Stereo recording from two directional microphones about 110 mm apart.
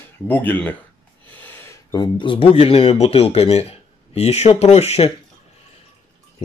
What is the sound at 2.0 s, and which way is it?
Speech, 50° left (ahead or behind).